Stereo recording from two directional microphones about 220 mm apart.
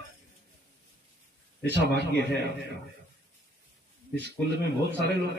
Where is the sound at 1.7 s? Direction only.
50° right (ahead or behind).